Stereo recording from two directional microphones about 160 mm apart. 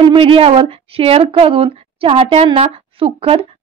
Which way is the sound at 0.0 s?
35° right (ahead or behind).